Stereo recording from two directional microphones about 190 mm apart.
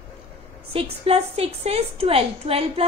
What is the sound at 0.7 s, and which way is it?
A woman's voice, 30° right (ahead or behind).